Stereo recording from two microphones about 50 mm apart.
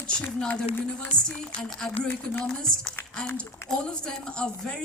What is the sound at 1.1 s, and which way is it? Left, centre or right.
Speech, centre.